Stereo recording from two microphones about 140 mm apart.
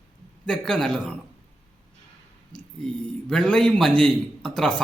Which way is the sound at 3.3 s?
5° left (ahead or behind).